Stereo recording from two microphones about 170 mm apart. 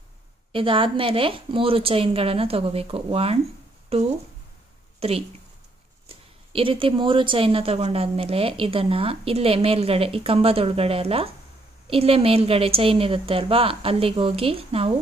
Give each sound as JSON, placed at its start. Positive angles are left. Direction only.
{"t": 0.5, "sound": "a woman's voice", "side_deg": -30}